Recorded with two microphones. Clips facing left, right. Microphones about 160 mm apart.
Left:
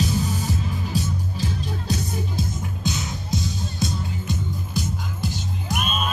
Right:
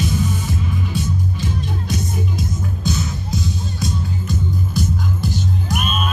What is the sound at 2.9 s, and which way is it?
Music, 20° left (ahead or behind).